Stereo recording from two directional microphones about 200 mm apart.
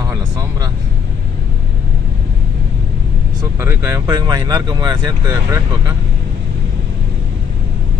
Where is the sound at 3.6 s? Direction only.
10° right (ahead or behind).